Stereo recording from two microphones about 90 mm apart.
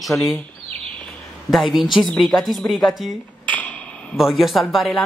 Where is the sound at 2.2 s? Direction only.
Centre (ahead or behind).